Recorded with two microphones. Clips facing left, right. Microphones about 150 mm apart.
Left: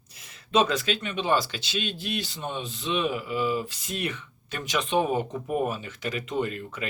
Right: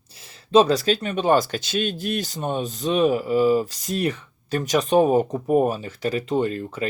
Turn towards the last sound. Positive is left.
turn(degrees=-35)  # may be behind; listen again after turning